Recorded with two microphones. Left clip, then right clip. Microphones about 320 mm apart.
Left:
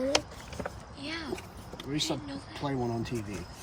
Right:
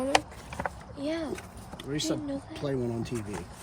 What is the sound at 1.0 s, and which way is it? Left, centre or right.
Speech, centre.